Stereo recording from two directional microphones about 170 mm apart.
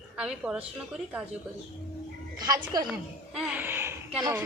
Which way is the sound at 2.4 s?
20° right (ahead or behind).